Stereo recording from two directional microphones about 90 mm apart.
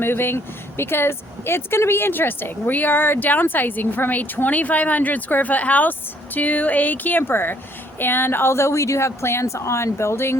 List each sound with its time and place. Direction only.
0.0 s a woman's voice: 25° left (ahead or behind)